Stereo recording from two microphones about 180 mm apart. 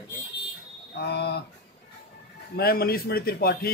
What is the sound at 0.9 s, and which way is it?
Speech, 65° left (ahead or behind).